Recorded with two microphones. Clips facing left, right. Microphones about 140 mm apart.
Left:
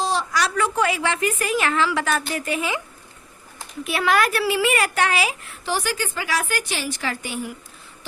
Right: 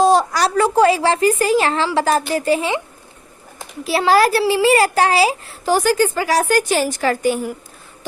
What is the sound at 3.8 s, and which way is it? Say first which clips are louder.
A child's voice: right 6 dB; 30° right (ahead or behind).